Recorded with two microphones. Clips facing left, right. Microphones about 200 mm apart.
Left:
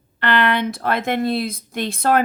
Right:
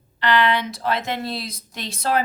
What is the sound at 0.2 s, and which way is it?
Speech, 55° left (ahead or behind).